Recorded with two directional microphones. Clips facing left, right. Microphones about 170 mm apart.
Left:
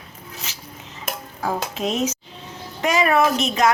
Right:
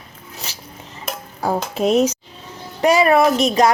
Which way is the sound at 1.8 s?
35° right (ahead or behind).